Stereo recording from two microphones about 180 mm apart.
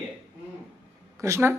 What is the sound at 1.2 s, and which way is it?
Speech, 15° right (ahead or behind).